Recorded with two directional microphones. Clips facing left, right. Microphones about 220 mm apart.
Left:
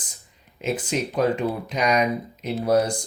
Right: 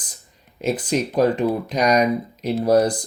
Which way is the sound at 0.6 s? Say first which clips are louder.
Right 4 dB; 35° right (ahead or behind).